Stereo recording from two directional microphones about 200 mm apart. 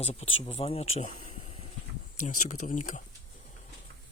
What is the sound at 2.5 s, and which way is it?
Speech, 40° left (ahead or behind).